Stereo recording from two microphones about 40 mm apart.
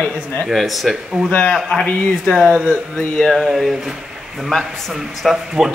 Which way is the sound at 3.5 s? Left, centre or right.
Centre.